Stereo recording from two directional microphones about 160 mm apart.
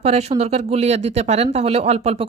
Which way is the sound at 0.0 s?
40° right (ahead or behind).